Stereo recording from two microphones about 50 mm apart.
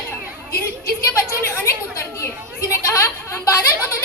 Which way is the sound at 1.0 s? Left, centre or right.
Left.